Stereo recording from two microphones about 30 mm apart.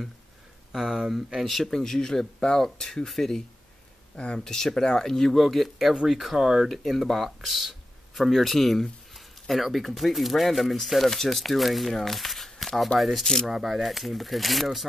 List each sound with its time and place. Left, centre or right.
0.7 s speech: centre
1.6 s speech: centre
4.1 s speech: left
4.5 s speech: centre
5.3 s speech: centre
6.3 s speech: centre
6.7 s speech: centre
13.2 s speech: centre
13.5 s speech: centre
13.7 s speech: centre